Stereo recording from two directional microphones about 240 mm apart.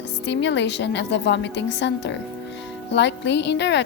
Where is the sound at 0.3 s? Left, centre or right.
Left.